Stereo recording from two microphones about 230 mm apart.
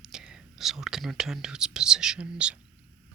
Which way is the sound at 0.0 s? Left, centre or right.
Centre.